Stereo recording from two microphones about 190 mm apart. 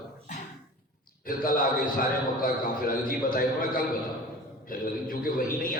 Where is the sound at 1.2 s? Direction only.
50° left (ahead or behind).